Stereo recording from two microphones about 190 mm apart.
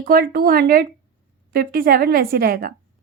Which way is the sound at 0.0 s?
50° right (ahead or behind).